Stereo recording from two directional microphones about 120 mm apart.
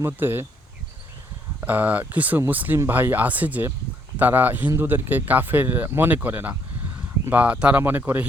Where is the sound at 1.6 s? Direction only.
15° right (ahead or behind).